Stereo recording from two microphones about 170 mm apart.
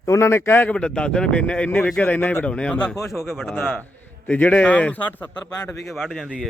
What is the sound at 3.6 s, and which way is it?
A man's voice, 10° left (ahead or behind).